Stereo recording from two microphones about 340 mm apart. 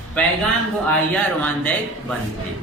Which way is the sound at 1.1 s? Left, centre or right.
Centre.